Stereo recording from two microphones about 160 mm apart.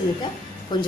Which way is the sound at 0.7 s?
30° left (ahead or behind).